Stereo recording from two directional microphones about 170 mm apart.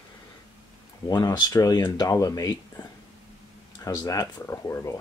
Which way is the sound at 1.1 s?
25° left (ahead or behind).